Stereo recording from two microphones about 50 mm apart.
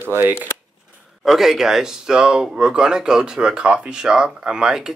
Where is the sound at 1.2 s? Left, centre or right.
Centre.